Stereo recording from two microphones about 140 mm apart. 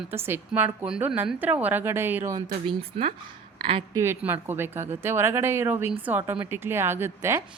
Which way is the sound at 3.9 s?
15° right (ahead or behind).